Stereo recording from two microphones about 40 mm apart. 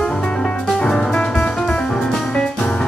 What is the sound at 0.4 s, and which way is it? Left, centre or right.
Music, centre.